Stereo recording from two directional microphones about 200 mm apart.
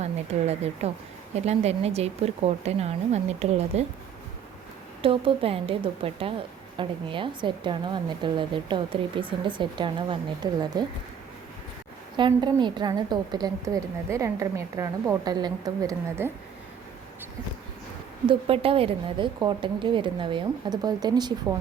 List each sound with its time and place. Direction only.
0.0 s a woman's voice: 30° right (ahead or behind)
5.0 s a woman's voice: 25° right (ahead or behind)
12.1 s a woman's voice: 25° right (ahead or behind)
18.3 s a woman's voice: 30° right (ahead or behind)